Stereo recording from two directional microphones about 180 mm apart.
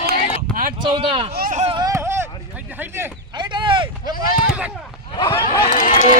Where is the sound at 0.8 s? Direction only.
30° right (ahead or behind).